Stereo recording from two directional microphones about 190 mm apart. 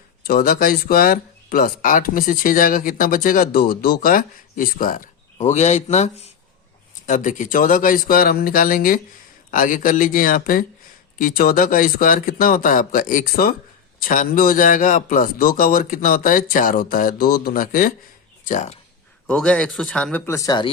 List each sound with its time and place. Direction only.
0.2 s speech: 50° left (ahead or behind)
19.3 s speech: 5° left (ahead or behind)